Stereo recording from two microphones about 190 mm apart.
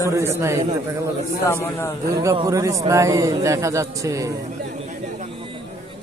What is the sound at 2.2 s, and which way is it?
Speech, 15° right (ahead or behind).